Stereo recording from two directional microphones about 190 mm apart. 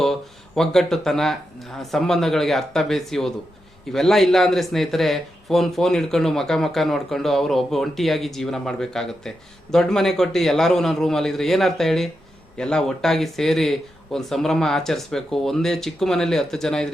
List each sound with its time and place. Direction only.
0.0 s speech: centre (ahead or behind)